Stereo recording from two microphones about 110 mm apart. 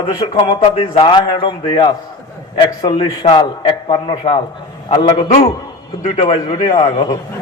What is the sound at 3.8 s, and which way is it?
Speech, 50° left (ahead or behind).